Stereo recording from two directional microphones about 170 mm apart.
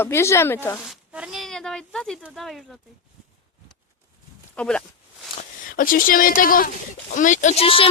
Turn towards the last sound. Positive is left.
turn(degrees=30)  # may be behind; listen again after turning